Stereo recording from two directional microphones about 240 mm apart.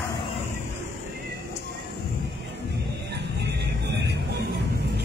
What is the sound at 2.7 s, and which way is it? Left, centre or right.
Music, right.